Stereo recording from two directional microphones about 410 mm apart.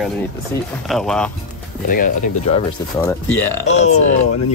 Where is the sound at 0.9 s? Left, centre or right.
Centre.